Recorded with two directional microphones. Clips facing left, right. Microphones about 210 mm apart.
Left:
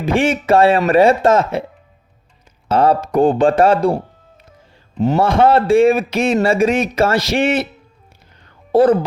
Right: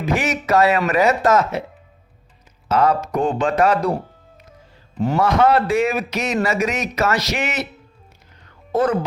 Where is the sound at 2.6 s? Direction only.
30° left (ahead or behind).